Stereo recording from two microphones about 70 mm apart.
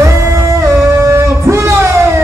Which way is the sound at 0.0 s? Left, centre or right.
Right.